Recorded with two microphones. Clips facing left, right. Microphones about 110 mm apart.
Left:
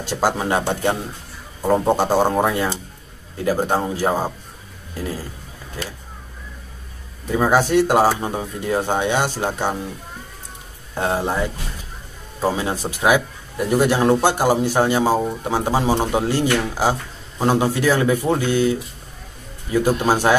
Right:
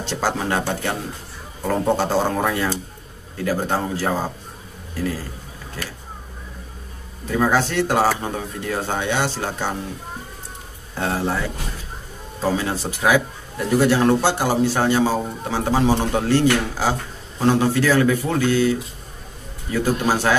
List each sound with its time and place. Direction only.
0.0 s speech: 15° left (ahead or behind)
7.2 s speech: 15° left (ahead or behind)
11.0 s speech: 20° left (ahead or behind)